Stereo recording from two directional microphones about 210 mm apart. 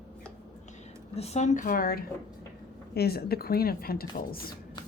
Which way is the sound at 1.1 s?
30° left (ahead or behind).